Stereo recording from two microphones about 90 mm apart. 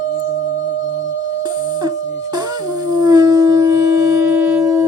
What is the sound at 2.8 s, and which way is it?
Shofar, 50° right (ahead or behind).